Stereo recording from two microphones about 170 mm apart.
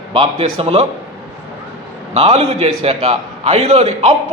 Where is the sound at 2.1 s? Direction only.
35° right (ahead or behind).